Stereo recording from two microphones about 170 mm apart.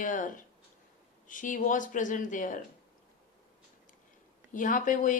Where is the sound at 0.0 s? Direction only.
50° left (ahead or behind).